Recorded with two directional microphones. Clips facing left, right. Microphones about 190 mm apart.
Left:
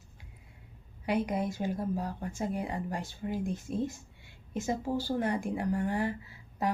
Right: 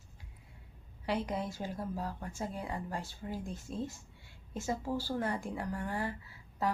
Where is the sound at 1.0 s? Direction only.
15° left (ahead or behind).